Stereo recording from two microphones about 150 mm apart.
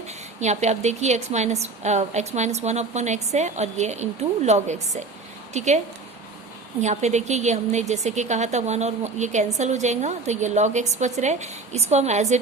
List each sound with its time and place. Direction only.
0.3 s a woman's voice: 50° right (ahead or behind)
6.8 s a woman's voice: 50° right (ahead or behind)